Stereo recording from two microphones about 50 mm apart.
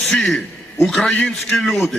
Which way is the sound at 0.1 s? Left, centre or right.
Centre.